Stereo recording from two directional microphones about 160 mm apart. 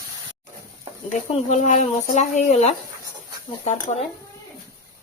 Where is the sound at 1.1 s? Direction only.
50° left (ahead or behind).